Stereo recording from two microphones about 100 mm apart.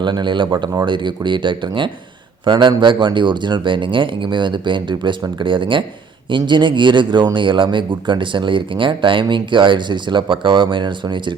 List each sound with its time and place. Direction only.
0.0 s speech: 50° right (ahead or behind)